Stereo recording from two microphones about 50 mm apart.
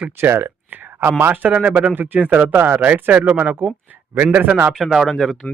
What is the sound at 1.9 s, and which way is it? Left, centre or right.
Speech, right.